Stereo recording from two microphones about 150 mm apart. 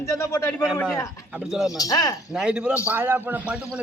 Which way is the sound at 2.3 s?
5° right (ahead or behind).